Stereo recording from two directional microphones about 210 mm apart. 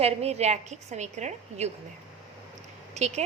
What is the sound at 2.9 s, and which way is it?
Speech, 30° right (ahead or behind).